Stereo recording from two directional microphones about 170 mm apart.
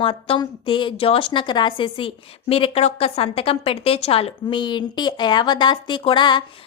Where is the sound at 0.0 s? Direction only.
30° left (ahead or behind).